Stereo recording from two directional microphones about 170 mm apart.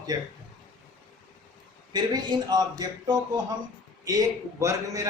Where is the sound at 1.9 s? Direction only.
25° right (ahead or behind).